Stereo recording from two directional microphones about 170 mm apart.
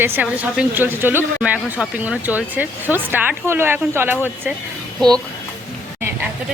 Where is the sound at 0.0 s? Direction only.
10° right (ahead or behind).